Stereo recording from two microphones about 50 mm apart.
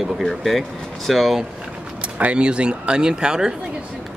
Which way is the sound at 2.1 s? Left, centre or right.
Right.